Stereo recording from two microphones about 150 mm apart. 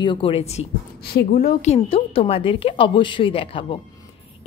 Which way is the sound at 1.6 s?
45° left (ahead or behind).